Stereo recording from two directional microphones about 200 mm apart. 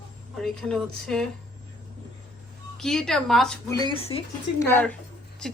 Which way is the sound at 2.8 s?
5° left (ahead or behind).